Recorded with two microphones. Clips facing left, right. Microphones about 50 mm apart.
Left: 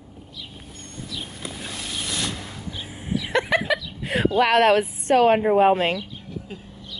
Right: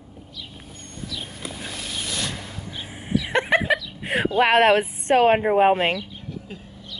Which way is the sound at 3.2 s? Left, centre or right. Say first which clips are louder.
Right 1 dB; right.